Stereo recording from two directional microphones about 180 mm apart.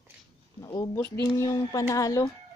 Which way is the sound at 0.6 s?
20° left (ahead or behind).